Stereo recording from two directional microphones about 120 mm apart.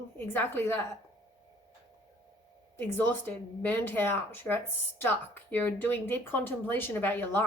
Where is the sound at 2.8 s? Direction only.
15° left (ahead or behind).